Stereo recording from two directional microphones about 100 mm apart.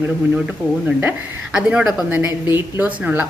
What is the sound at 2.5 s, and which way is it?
Speech, 20° right (ahead or behind).